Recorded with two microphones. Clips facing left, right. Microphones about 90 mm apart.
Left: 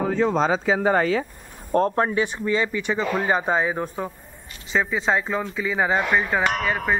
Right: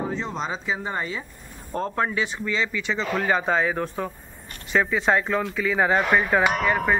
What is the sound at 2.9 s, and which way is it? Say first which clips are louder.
Speech: left 1 dB; 15° left (ahead or behind).